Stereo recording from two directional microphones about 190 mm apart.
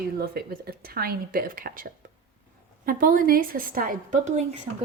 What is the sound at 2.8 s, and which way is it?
A woman's voice, 50° right (ahead or behind).